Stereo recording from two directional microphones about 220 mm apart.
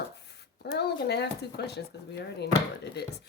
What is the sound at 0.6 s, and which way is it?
Speech, 50° left (ahead or behind).